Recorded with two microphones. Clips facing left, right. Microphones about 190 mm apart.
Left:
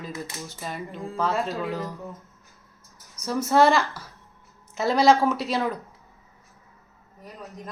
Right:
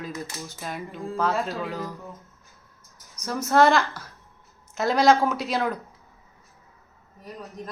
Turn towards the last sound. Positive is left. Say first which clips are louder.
# even
turn(degrees=0)  # may be behind; listen again after turning